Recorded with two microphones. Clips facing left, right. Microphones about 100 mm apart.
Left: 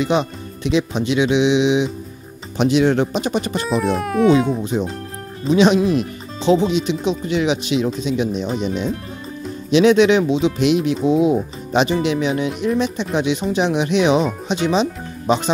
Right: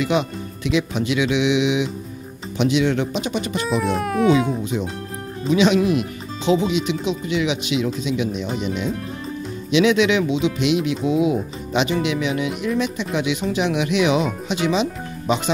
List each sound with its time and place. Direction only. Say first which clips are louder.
0.0 s speech: left 2 dB; 30° left (ahead or behind)
2.5 s speech: left 3 dB; 40° left (ahead or behind)
3.6 s speech: even; centre (ahead or behind)
5.5 s speech: left 2 dB; 35° left (ahead or behind)